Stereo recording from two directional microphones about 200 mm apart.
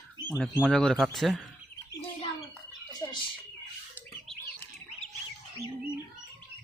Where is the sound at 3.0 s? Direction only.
15° left (ahead or behind).